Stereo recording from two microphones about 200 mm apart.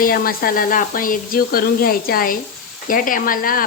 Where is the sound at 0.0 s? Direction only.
45° left (ahead or behind).